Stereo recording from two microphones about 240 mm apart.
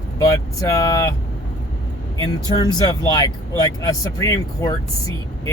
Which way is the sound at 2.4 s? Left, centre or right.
Centre.